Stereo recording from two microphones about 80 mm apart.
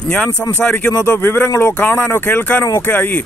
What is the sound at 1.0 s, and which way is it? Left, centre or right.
Speech, left.